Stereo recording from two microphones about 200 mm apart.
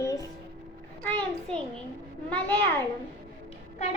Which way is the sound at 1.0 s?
5° left (ahead or behind).